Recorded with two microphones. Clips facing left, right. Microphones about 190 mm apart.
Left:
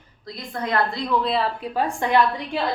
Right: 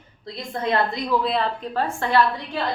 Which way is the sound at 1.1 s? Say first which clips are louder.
Even; centre (ahead or behind).